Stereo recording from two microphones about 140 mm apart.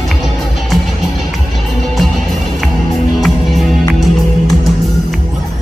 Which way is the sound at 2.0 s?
Centre (ahead or behind).